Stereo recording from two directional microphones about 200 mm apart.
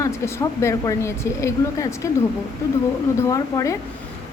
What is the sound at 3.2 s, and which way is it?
Speech, 15° left (ahead or behind).